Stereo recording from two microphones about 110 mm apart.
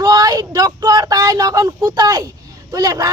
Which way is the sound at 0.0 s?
35° right (ahead or behind).